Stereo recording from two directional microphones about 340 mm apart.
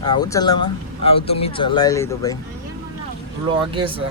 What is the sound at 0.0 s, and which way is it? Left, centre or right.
Speech, centre.